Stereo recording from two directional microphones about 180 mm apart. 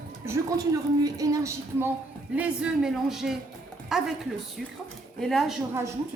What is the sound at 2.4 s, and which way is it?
A man's voice, 5° right (ahead or behind).